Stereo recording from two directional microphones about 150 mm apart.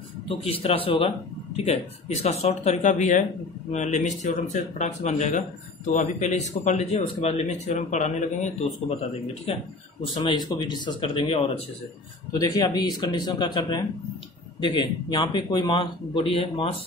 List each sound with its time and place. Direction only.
0.3 s speech: 40° left (ahead or behind)
10.5 s speech: 30° left (ahead or behind)
12.4 s speech: 25° left (ahead or behind)